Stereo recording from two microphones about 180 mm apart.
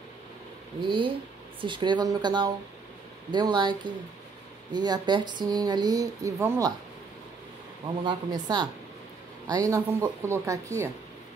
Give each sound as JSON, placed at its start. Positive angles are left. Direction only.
{"t": 0.7, "sound": "speech", "side_deg": -25}
{"t": 8.0, "sound": "speech", "side_deg": -20}